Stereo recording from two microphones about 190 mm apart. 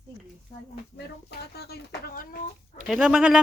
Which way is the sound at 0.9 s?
60° left (ahead or behind).